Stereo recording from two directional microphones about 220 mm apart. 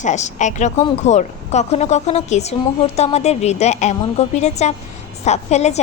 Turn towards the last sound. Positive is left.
turn(degrees=30)  # may be behind; listen again after turning